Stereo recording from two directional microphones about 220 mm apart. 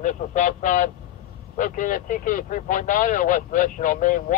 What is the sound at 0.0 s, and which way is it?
A man's voice, 35° left (ahead or behind).